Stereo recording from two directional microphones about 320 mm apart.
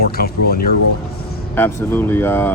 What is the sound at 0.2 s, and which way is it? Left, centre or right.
Speech, left.